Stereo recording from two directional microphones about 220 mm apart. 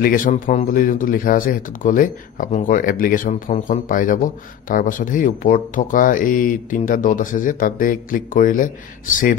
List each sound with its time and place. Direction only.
0.0 s speech: 40° left (ahead or behind)